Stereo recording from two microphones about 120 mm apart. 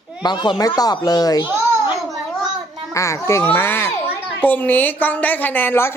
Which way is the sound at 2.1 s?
Centre (ahead or behind).